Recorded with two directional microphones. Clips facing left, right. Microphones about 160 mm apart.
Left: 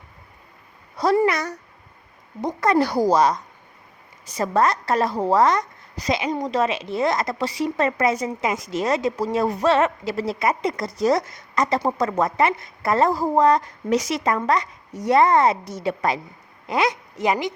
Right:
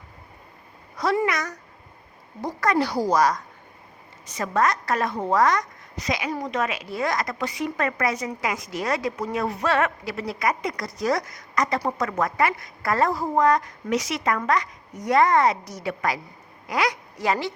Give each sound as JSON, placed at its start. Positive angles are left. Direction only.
{"t": 0.9, "sound": "a child's voice", "side_deg": 35}
{"t": 2.7, "sound": "speech", "side_deg": 50}
{"t": 3.1, "sound": "a woman's voice", "side_deg": 25}